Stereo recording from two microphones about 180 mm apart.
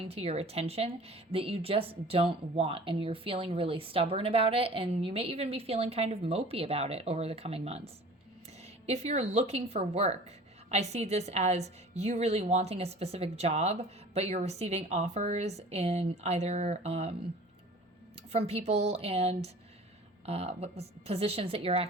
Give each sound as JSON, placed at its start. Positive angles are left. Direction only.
{"t": 0.0, "sound": "a woman's voice", "side_deg": -35}
{"t": 18.3, "sound": "a woman's voice", "side_deg": -35}